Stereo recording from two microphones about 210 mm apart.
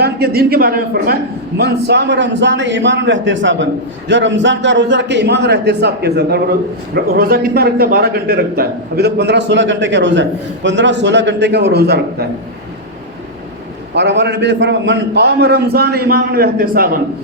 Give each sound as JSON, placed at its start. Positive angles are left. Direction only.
{"t": 0.0, "sound": "a man's voice", "side_deg": -50}
{"t": 13.9, "sound": "a man's voice", "side_deg": -55}